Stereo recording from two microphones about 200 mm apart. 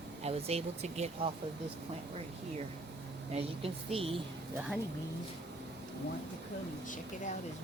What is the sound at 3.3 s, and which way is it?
Speech, 30° right (ahead or behind).